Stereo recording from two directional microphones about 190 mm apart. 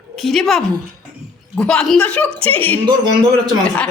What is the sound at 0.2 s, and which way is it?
A woman's voice, centre (ahead or behind).